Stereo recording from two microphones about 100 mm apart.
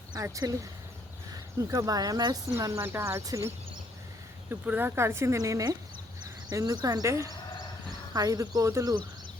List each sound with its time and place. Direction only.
0.1 s speech: 35° right (ahead or behind)
2.5 s speech: 30° right (ahead or behind)
4.4 s speech: 20° right (ahead or behind); by 9.0 s 35° right (ahead or behind)